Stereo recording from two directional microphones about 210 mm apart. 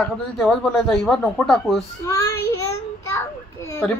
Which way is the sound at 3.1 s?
15° left (ahead or behind).